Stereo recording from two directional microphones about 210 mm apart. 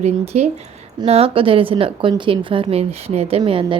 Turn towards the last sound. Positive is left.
turn(degrees=-25)  # may be behind; listen again after turning